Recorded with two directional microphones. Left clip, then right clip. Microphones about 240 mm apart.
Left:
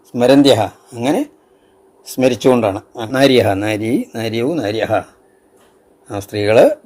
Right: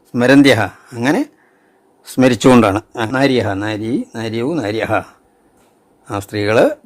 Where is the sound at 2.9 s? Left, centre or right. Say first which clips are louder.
Right 5 dB; right.